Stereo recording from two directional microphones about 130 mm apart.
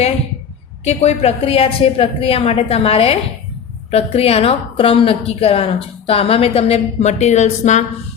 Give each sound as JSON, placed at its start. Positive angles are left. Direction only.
{"t": 0.9, "sound": "a woman's voice", "side_deg": 55}